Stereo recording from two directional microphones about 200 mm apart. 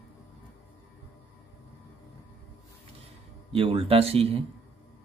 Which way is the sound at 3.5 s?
25° right (ahead or behind).